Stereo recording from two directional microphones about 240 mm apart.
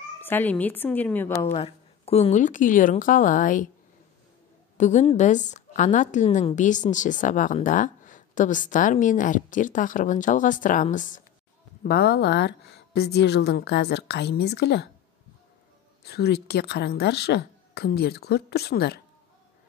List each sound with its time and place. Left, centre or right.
0.2 s a woman's voice: centre
1.5 s a woman's voice: left
4.7 s a woman's voice: left
16.0 s a woman's voice: left